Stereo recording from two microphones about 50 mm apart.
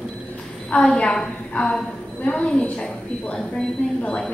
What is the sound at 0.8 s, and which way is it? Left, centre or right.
A woman's voice, centre.